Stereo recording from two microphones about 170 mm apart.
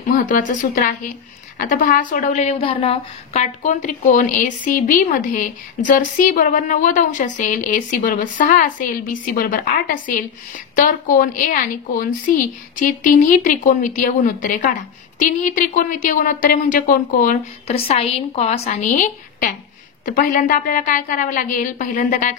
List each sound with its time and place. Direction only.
0.3 s a woman's voice: 50° left (ahead or behind)
17.6 s a woman's voice: 35° left (ahead or behind)